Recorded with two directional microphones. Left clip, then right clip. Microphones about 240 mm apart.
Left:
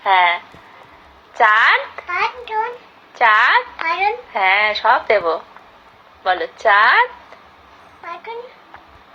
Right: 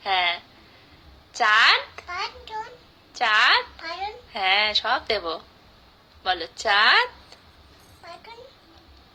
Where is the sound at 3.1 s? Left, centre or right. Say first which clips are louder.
Left 6 dB; right.